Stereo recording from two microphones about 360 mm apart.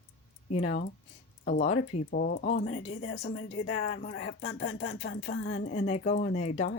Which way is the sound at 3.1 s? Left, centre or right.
Left.